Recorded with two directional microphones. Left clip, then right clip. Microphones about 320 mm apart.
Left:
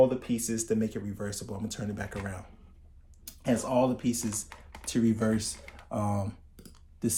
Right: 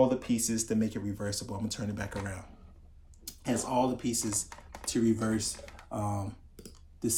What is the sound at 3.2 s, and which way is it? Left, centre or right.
Speech, left.